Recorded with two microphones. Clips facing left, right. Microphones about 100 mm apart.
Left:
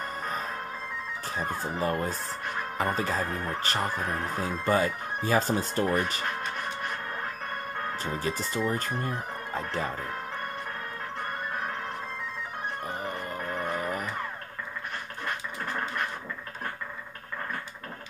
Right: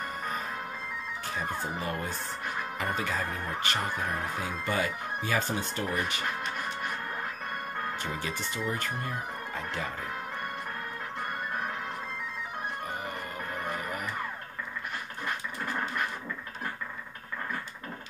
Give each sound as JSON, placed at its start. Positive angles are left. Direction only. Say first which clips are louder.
{"t": 1.8, "sound": "speech", "louder": "left 5 dB", "side_deg": 35}
{"t": 8.0, "sound": "speech", "louder": "left 3 dB", "side_deg": 35}
{"t": 13.7, "sound": "music", "louder": "left 4 dB", "side_deg": 35}